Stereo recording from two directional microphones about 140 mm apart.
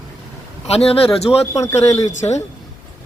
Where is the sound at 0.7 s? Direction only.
45° left (ahead or behind).